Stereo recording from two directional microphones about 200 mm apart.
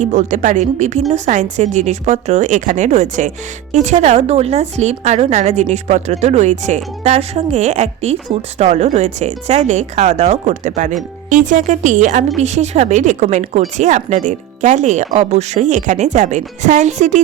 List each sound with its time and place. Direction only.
0.0 s a woman's voice: 40° right (ahead or behind)